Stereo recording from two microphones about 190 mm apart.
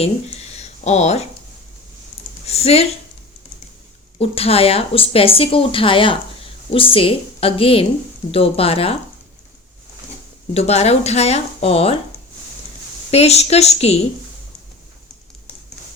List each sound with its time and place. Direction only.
0.0 s a sound: 35° left (ahead or behind)
2.5 s speech: 35° left (ahead or behind)
4.2 s speech: 30° left (ahead or behind)
10.5 s speech: 35° left (ahead or behind)
13.1 s speech: 35° left (ahead or behind)